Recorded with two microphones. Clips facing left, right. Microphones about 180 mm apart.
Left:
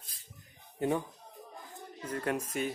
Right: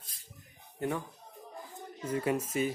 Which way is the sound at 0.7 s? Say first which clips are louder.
Left 3 dB; 20° left (ahead or behind).